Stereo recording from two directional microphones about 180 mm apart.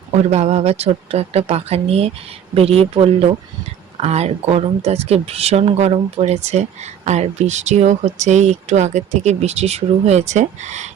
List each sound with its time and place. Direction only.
0.3 s speech: 35° right (ahead or behind)